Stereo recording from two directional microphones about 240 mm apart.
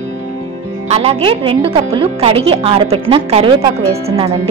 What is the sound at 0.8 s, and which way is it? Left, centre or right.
A woman's voice, right.